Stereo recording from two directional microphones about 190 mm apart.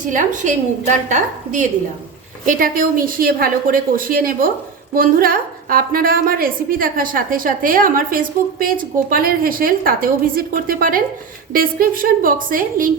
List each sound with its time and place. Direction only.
0.0 s a woman's voice: 45° right (ahead or behind)